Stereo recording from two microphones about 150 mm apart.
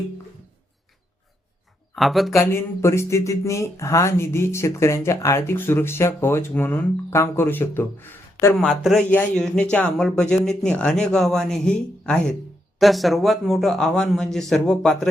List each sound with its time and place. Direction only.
2.0 s speech: centre (ahead or behind)
2.3 s speech: 15° left (ahead or behind)
8.5 s speech: centre (ahead or behind)